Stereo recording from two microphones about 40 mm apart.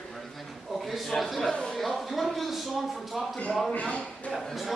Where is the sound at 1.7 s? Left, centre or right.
Centre.